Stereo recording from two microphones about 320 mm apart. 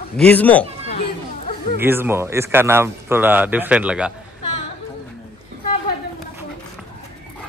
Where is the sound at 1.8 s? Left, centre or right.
Centre.